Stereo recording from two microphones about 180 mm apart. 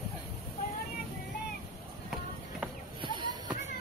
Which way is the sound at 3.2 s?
25° right (ahead or behind).